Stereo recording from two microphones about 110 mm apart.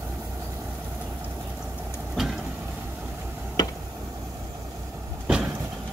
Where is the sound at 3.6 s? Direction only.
40° left (ahead or behind).